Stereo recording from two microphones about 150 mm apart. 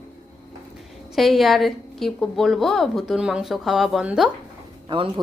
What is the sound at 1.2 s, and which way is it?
A woman's voice, centre (ahead or behind).